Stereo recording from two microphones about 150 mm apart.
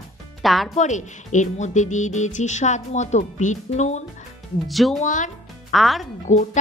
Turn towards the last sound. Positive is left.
turn(degrees=55)  # may be behind; listen again after turning